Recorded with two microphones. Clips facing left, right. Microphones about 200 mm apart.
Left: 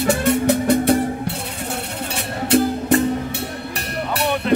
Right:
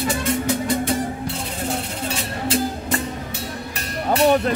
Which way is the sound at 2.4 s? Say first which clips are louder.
Left 7 dB; 65° left (ahead or behind).